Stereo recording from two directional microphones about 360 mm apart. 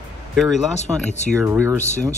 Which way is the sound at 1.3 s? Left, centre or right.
Centre.